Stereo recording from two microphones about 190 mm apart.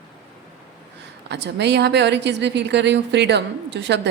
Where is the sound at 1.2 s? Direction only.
65° right (ahead or behind).